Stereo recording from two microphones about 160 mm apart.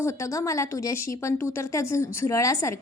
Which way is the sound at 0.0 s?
20° left (ahead or behind).